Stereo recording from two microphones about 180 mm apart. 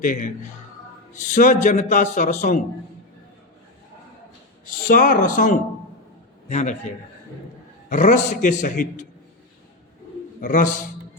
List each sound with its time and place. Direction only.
0.0 s a man's voice: 50° left (ahead or behind)
1.3 s a man's voice: 45° left (ahead or behind)
4.9 s a man's voice: 50° left (ahead or behind)
7.9 s a man's voice: 45° left (ahead or behind)
10.4 s a man's voice: 45° left (ahead or behind)